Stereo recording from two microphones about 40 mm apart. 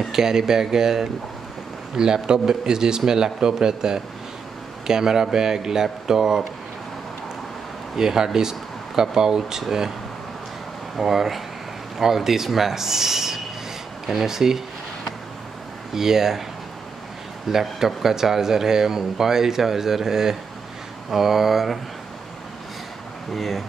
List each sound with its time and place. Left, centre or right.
0.1 s speech: centre
7.9 s speech: centre
11.0 s speech: centre
15.9 s speech: centre
17.5 s speech: centre
23.3 s speech: centre